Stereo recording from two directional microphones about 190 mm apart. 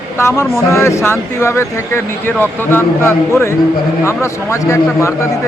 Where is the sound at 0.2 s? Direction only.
15° left (ahead or behind).